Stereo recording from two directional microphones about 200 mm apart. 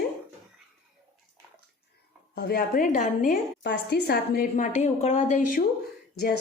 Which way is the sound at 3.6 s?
55° left (ahead or behind).